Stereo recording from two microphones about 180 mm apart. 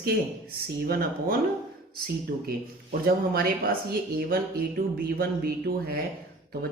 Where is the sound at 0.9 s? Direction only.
55° right (ahead or behind).